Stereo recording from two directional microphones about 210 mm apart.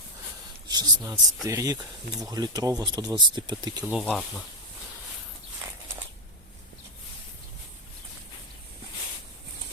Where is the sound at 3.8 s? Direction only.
5° right (ahead or behind).